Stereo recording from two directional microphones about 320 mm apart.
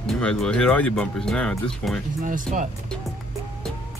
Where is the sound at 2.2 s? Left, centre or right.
Right.